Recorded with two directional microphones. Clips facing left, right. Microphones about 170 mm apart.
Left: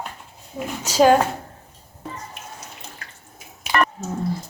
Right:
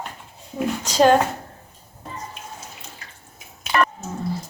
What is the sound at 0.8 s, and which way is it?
Speech, 5° left (ahead or behind).